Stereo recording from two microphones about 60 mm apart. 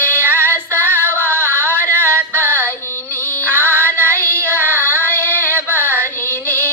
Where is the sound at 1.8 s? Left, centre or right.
Right.